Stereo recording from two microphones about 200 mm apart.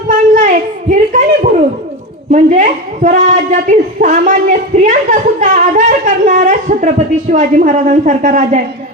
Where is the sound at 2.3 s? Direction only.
40° right (ahead or behind).